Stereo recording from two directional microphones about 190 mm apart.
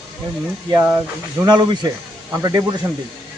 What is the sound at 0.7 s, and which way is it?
Speech, 10° right (ahead or behind).